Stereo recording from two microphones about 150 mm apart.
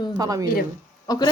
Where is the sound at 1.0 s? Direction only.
25° left (ahead or behind).